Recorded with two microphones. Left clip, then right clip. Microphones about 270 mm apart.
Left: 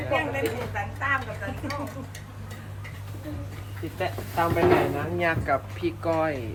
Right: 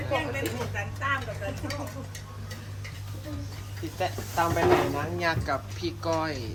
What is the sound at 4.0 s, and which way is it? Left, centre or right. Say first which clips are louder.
Sizzle: left 1 dB; right.